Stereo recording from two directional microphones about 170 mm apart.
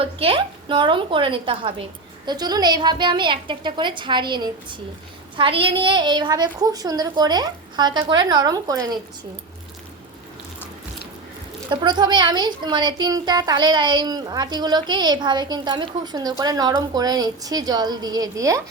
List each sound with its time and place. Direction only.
0.0 s a woman's voice: 35° right (ahead or behind)
11.7 s a woman's voice: 25° right (ahead or behind)